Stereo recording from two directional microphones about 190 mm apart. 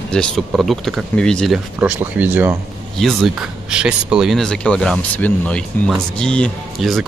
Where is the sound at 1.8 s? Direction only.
10° right (ahead or behind).